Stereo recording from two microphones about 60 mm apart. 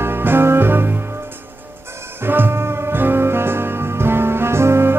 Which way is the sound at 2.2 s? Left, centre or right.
Right.